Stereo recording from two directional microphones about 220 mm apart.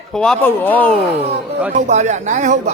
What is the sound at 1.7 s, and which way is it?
Speech, 35° right (ahead or behind).